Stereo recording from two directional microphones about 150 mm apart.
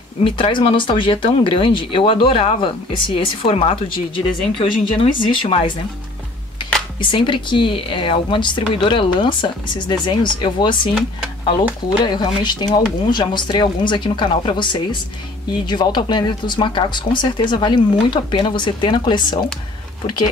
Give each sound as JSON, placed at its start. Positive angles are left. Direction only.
{"t": 0.2, "sound": "speech", "side_deg": 35}
{"t": 7.0, "sound": "speech", "side_deg": 35}
{"t": 12.0, "sound": "speech", "side_deg": 30}